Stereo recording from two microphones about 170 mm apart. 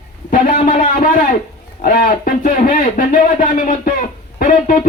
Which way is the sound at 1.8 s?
55° left (ahead or behind).